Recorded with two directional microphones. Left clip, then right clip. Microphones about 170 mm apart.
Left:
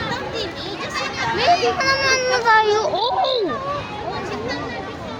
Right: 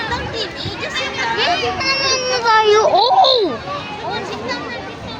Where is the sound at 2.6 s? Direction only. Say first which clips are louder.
Right 7 dB; 25° right (ahead or behind).